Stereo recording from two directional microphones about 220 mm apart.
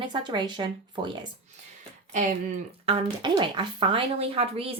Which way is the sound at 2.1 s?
35° right (ahead or behind).